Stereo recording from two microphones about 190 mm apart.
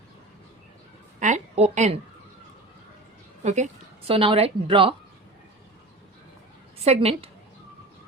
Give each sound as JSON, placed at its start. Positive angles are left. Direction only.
{"t": 1.2, "sound": "a sound", "side_deg": -35}
{"t": 3.4, "sound": "a woman's voice", "side_deg": -35}
{"t": 6.7, "sound": "a woman's voice", "side_deg": -35}